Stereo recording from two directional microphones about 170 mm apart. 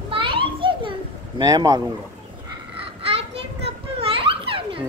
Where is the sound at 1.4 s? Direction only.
25° right (ahead or behind).